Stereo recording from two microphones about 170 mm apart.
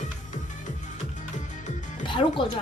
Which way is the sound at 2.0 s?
30° left (ahead or behind).